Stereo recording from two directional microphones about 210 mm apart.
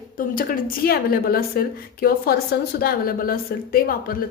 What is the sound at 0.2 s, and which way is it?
A woman's voice, 40° left (ahead or behind).